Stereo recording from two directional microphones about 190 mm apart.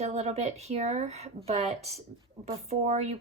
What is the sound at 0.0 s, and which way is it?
Speech, 35° right (ahead or behind).